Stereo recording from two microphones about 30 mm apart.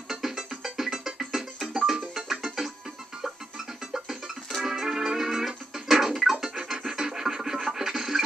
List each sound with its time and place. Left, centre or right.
0.1 s music: centre
4.6 s music: centre